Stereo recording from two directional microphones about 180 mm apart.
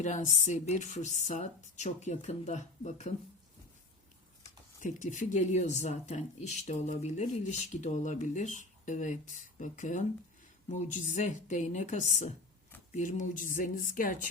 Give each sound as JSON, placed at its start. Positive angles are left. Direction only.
{"t": 0.0, "sound": "speech", "side_deg": 40}
{"t": 4.8, "sound": "a woman's voice", "side_deg": 45}